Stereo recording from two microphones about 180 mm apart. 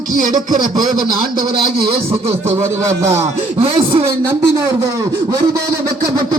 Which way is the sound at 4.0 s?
15° right (ahead or behind).